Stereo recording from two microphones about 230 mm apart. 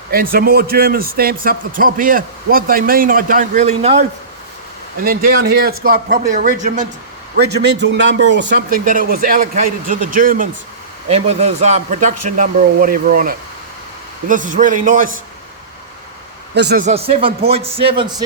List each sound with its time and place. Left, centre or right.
0.1 s a man's voice: right
5.0 s a man's voice: right
7.3 s a man's voice: right
8.8 s a man's voice: right
16.6 s a man's voice: right
16.8 s speech: right